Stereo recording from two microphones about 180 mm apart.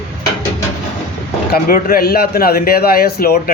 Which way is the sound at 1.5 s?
55° left (ahead or behind).